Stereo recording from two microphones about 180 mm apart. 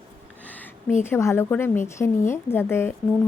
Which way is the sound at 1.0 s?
15° left (ahead or behind).